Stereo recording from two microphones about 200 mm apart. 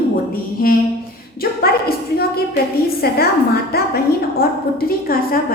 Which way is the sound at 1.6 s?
50° left (ahead or behind).